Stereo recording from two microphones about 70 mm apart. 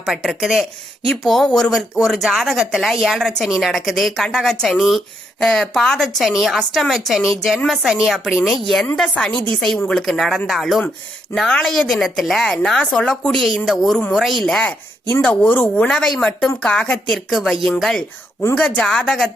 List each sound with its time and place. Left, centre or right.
0.0 s speech: centre
1.5 s a woman's voice: centre
13.3 s a woman's voice: centre
15.2 s a woman's voice: centre
18.5 s a woman's voice: centre